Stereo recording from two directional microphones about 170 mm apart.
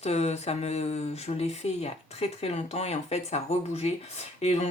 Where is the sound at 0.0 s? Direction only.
40° left (ahead or behind).